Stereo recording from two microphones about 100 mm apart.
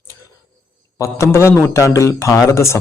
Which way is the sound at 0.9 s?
30° left (ahead or behind).